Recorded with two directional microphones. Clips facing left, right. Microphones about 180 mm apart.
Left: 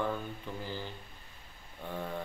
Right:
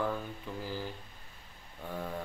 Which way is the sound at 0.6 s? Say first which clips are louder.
Right 3 dB; 5° right (ahead or behind).